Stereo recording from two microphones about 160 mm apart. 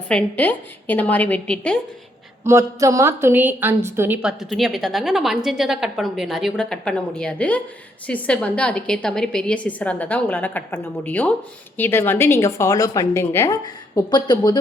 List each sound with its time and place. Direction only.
0.1 s a woman's voice: 10° left (ahead or behind)
2.5 s a woman's voice: 20° right (ahead or behind); by 14.6 s 25° left (ahead or behind)